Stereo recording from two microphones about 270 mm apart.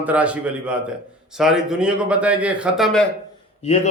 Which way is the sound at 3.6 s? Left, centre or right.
Left.